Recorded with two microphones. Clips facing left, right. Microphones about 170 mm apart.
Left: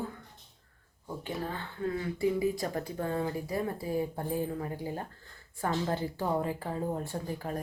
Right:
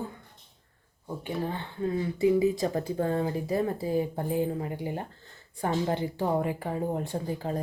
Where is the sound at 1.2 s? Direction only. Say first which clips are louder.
Right 4 dB; 20° right (ahead or behind).